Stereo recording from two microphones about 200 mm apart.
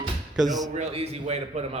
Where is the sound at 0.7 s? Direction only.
30° right (ahead or behind).